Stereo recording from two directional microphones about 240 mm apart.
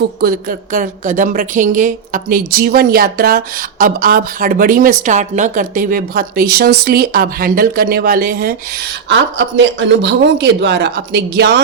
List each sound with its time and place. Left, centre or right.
0.2 s a woman's voice: right
9.0 s speech: right